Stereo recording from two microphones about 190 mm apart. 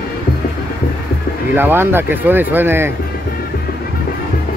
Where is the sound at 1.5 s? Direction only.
10° right (ahead or behind).